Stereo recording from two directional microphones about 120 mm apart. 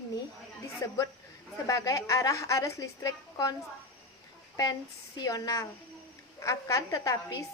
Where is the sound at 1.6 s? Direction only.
30° left (ahead or behind).